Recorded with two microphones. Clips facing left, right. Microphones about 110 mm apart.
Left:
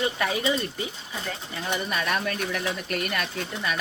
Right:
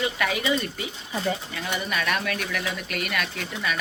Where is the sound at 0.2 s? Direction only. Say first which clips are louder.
Even; 30° left (ahead or behind).